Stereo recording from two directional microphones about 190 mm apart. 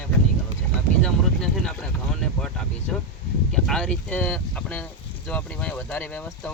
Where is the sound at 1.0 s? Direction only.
5° left (ahead or behind).